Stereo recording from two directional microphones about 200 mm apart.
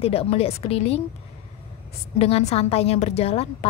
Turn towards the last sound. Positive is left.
turn(degrees=30)  # may be behind; listen again after turning